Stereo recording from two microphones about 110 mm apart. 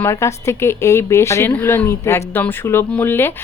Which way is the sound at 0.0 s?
25° left (ahead or behind).